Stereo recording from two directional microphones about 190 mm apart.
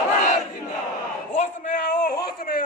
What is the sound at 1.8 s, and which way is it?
Speech, 55° left (ahead or behind).